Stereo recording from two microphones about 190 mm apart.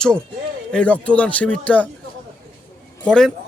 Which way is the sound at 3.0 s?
5° left (ahead or behind).